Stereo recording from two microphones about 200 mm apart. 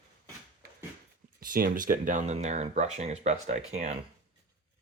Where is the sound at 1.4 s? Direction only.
45° right (ahead or behind).